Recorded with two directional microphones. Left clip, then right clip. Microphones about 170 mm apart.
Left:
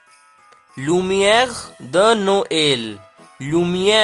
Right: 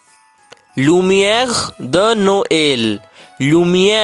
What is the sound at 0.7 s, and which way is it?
Speech, 40° right (ahead or behind).